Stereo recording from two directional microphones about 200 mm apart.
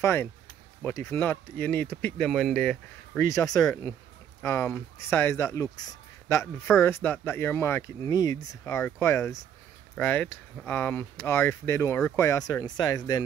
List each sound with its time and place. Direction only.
0.0 s speech: 10° left (ahead or behind)
3.2 s speech: 15° left (ahead or behind)